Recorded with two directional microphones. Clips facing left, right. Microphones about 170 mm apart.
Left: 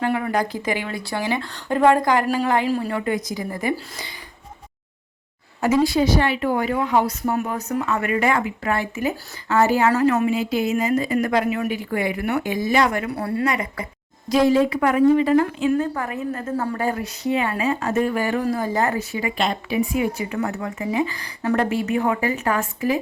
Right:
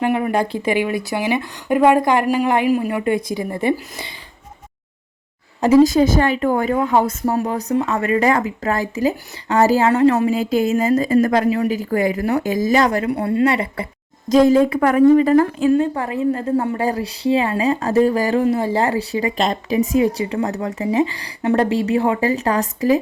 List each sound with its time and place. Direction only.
0.0 s speech: 20° right (ahead or behind)
5.8 s speech: 40° right (ahead or behind)
7.3 s speech: 35° right (ahead or behind)
13.1 s speech: 20° right (ahead or behind)
14.3 s speech: 40° right (ahead or behind)
15.7 s speech: 25° right (ahead or behind)